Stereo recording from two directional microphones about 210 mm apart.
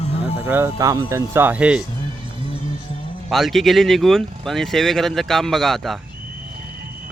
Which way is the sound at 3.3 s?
Centre (ahead or behind).